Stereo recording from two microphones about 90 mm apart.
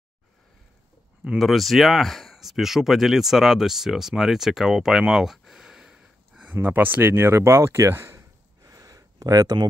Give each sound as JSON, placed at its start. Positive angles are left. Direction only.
{"t": 1.4, "sound": "speech", "side_deg": 0}